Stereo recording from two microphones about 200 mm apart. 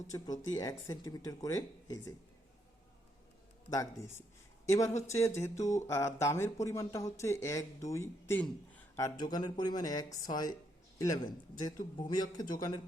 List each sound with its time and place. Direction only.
0.1 s a man's voice: 20° left (ahead or behind)
3.7 s a man's voice: 15° left (ahead or behind)